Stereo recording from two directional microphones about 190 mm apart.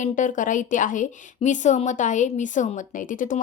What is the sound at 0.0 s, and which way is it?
A woman's voice, 45° left (ahead or behind).